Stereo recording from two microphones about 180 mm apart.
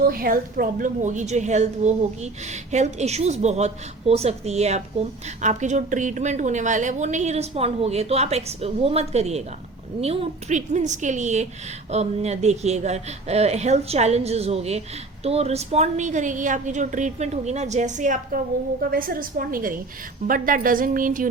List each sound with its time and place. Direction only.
0.0 s a woman's voice: 55° right (ahead or behind)